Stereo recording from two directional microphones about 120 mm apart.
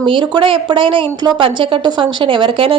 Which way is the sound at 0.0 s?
45° right (ahead or behind).